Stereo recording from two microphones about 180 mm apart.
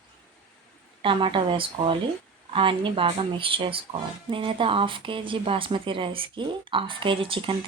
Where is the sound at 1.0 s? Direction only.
30° right (ahead or behind).